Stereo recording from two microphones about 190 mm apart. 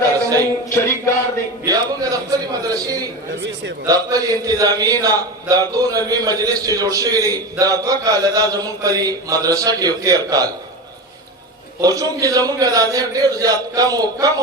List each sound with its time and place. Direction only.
0.7 s music: 15° left (ahead or behind)
1.6 s a sound: 20° right (ahead or behind)
3.4 s a man's voice: 65° right (ahead or behind)
3.8 s speech: 20° right (ahead or behind)
11.8 s speech: 20° right (ahead or behind)